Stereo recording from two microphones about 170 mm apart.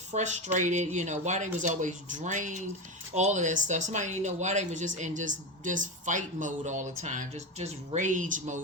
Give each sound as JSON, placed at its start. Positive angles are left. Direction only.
{"t": 0.1, "sound": "speech", "side_deg": -45}